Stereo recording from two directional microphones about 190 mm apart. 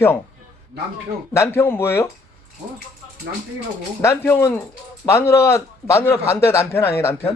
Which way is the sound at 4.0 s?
15° left (ahead or behind).